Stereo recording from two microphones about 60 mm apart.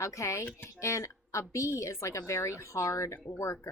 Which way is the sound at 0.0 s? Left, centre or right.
Left.